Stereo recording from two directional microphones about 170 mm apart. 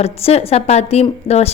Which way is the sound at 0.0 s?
35° left (ahead or behind).